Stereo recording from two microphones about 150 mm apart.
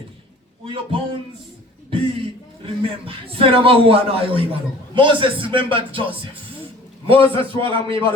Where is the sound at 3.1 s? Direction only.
35° right (ahead or behind).